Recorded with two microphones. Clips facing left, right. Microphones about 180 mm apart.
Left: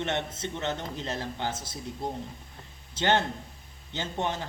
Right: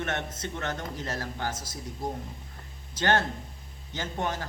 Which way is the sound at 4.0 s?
20° left (ahead or behind).